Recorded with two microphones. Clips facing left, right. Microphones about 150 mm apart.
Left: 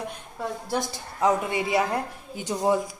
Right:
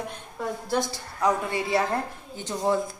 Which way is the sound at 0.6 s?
15° left (ahead or behind).